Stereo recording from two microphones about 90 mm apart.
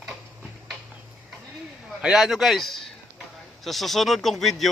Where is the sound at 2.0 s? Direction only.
5° right (ahead or behind).